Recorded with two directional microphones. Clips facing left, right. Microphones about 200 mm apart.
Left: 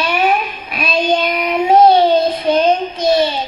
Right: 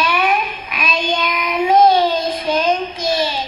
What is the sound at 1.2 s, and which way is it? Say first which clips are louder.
Child singing: left 3 dB; 30° left (ahead or behind).